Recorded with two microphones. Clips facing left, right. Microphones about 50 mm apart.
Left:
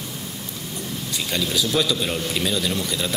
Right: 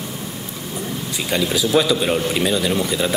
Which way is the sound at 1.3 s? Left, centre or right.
Centre.